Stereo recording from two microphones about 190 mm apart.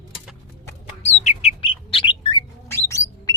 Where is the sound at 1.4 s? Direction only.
30° left (ahead or behind).